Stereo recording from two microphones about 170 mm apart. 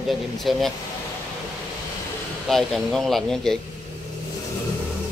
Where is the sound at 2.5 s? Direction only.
Centre (ahead or behind).